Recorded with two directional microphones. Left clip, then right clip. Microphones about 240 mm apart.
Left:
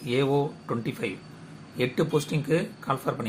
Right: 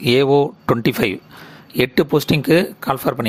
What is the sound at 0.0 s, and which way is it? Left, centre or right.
Speech, right.